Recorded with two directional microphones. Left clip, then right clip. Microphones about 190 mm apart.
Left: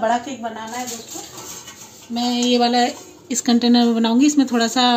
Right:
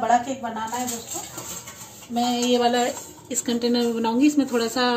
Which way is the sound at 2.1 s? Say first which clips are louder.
Left 3 dB; 35° left (ahead or behind).